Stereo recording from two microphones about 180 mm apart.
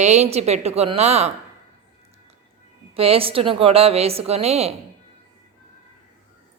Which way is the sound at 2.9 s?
30° right (ahead or behind).